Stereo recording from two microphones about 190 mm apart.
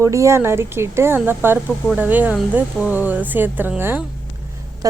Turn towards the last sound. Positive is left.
turn(degrees=-10)  # may be behind; listen again after turning